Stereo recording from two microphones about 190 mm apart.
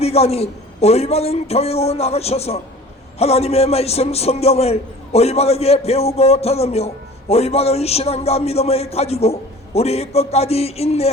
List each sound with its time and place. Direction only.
0.0 s a man's voice: 35° left (ahead or behind)